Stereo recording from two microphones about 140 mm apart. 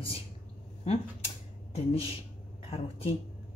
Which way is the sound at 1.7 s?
45° left (ahead or behind).